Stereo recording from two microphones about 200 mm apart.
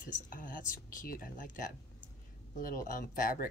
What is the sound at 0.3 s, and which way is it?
Speech, 40° left (ahead or behind).